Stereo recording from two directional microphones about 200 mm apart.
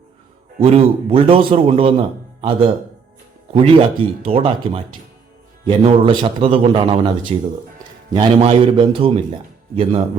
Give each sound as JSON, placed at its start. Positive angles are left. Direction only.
{"t": 0.6, "sound": "speech", "side_deg": -30}